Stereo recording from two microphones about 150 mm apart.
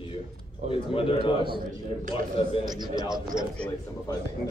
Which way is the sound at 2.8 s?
30° right (ahead or behind).